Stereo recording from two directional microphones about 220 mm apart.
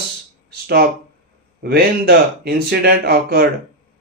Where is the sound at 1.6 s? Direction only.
45° right (ahead or behind).